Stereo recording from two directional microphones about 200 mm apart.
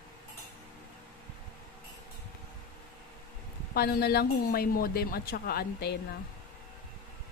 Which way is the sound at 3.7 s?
50° left (ahead or behind).